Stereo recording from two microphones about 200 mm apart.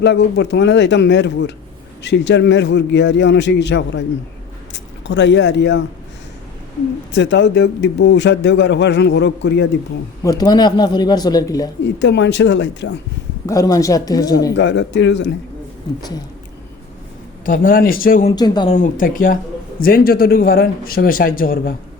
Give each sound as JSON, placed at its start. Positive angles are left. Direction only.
{"t": 0.0, "sound": "a man's voice", "side_deg": 60}
{"t": 5.0, "sound": "a man's voice", "side_deg": 60}
{"t": 7.1, "sound": "a man's voice", "side_deg": 65}
{"t": 10.2, "sound": "speech", "side_deg": 20}
{"t": 11.9, "sound": "a man's voice", "side_deg": 60}
{"t": 13.5, "sound": "speech", "side_deg": 15}
{"t": 14.5, "sound": "a man's voice", "side_deg": 65}
{"t": 17.4, "sound": "speech", "side_deg": 45}
{"t": 18.3, "sound": "speech", "side_deg": 20}
{"t": 18.8, "sound": "speech", "side_deg": 45}